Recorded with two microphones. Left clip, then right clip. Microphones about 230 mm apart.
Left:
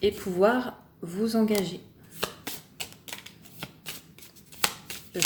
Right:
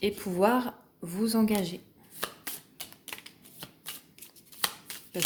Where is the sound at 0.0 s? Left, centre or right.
Right.